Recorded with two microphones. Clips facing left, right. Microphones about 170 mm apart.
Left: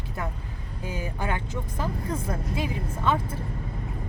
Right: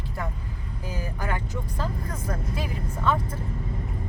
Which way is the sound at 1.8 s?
10° left (ahead or behind).